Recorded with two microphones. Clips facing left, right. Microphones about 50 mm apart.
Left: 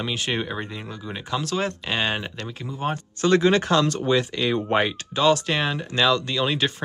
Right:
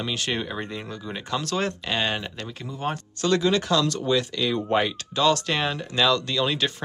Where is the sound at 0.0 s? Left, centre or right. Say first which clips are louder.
Left 1 dB; centre.